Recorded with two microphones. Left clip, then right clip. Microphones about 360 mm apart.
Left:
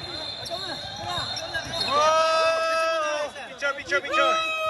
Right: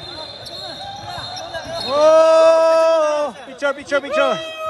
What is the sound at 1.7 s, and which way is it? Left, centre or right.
Basketball bounce, centre.